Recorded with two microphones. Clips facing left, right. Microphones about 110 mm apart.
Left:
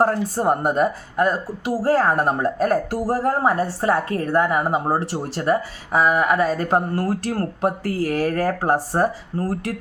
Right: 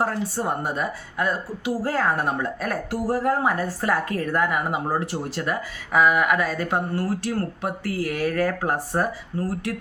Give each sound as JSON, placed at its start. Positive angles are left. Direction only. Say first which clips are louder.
{"t": 0.0, "sound": "a woman's voice", "louder": "left 6 dB", "side_deg": 40}